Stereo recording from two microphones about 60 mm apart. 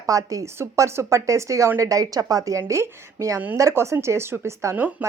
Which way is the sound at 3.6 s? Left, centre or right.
Right.